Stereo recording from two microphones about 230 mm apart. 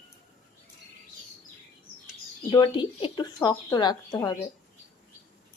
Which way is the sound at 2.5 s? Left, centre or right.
Centre.